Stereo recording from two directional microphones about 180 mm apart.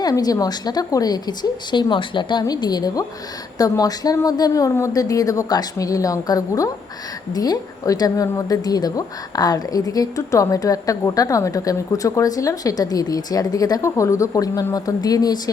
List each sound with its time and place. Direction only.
0.0 s a woman's voice: 20° left (ahead or behind)